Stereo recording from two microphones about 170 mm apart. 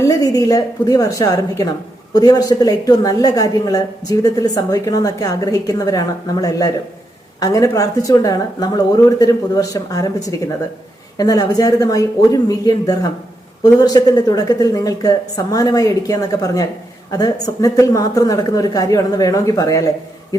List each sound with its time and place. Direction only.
0.0 s a woman's voice: 20° left (ahead or behind)